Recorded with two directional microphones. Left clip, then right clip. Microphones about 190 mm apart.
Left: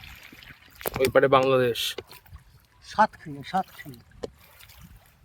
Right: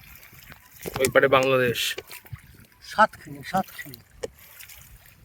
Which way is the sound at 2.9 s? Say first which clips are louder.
Right 2 dB; 60° right (ahead or behind).